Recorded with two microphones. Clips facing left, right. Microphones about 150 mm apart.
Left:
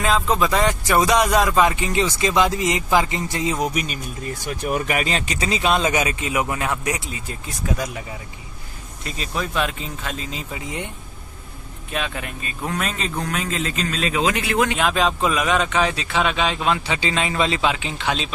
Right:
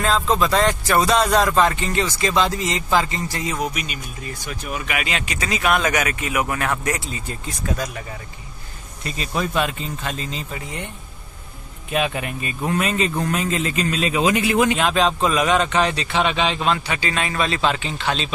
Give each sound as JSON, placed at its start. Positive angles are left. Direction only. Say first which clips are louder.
{"t": 0.0, "sound": "speech", "louder": "even", "side_deg": 10}
{"t": 3.7, "sound": "speech", "louder": "left 4 dB", "side_deg": 40}
{"t": 9.0, "sound": "a man's voice", "louder": "right 2 dB", "side_deg": 0}
{"t": 10.5, "sound": "speech", "louder": "left 1 dB", "side_deg": 15}
{"t": 11.9, "sound": "a man's voice", "louder": "right 5 dB", "side_deg": -5}
{"t": 16.9, "sound": "speech", "louder": "left 1 dB", "side_deg": 20}